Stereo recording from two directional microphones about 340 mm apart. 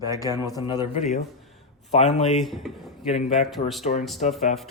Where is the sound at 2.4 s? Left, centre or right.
Centre.